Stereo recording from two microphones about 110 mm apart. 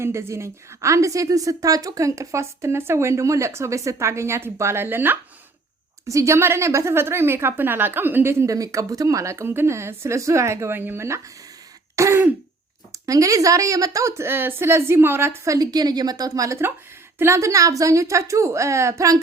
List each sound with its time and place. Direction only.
0.0 s a woman's voice: 25° right (ahead or behind)
11.9 s throat clearing: 30° right (ahead or behind)
12.9 s a woman's voice: 30° right (ahead or behind)
15.5 s a woman's voice: 35° right (ahead or behind)